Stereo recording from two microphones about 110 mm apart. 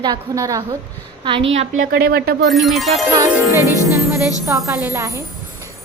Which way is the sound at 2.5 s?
Centre (ahead or behind).